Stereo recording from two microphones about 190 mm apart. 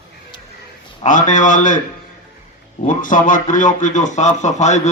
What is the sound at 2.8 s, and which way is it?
A man's voice, 45° left (ahead or behind).